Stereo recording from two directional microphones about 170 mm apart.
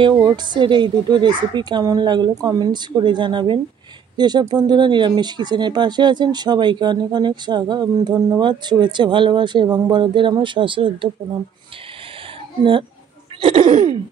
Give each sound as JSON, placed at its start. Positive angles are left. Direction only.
{"t": 0.2, "sound": "speech", "side_deg": -25}
{"t": 13.4, "sound": "throat clearing", "side_deg": -30}